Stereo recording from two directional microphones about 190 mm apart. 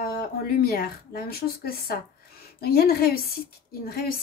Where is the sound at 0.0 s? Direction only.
50° left (ahead or behind).